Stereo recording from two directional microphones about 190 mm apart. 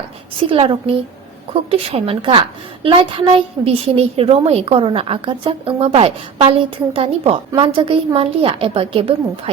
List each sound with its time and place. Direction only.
0.5 s a woman's voice: 30° right (ahead or behind)